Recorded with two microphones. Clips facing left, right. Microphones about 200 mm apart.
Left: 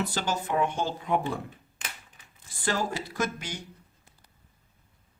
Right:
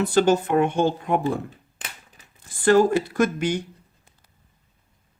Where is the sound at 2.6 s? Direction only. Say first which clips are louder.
Right 13 dB; 55° right (ahead or behind).